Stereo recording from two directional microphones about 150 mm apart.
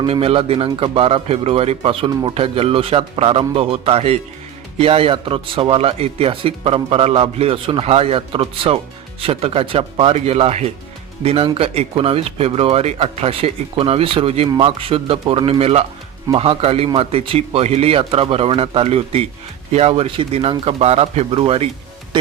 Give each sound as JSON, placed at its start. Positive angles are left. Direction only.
{"t": 0.0, "sound": "speech", "side_deg": -40}